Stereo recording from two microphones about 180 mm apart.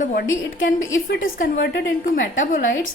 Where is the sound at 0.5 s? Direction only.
90° left.